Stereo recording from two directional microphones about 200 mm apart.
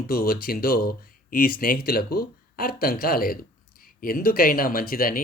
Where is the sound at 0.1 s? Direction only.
45° left (ahead or behind).